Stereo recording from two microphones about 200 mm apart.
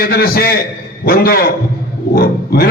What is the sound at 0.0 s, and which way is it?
A man's voice, 50° left (ahead or behind).